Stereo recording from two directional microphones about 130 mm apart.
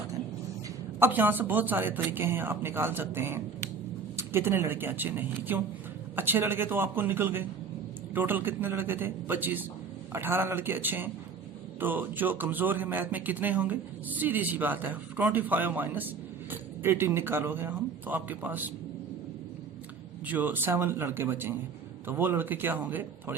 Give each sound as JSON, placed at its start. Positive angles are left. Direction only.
{"t": 0.9, "sound": "speech", "side_deg": -15}
{"t": 20.2, "sound": "speech", "side_deg": -15}